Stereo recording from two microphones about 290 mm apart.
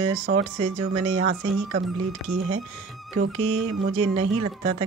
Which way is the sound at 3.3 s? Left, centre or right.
Right.